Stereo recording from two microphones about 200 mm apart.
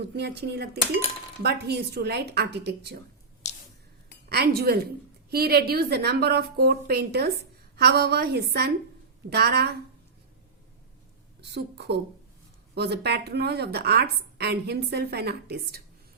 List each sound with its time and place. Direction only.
0.2 s a woman's voice: 55° right (ahead or behind)
3.4 s a sound: 35° left (ahead or behind)
4.3 s a woman's voice: 50° right (ahead or behind)
11.3 s a woman's voice: 55° right (ahead or behind)